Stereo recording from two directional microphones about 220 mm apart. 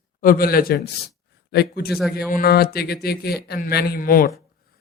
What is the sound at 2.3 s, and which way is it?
Speech, 45° left (ahead or behind).